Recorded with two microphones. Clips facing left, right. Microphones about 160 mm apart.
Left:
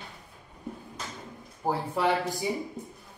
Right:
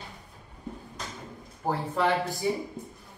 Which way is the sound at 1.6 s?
10° left (ahead or behind).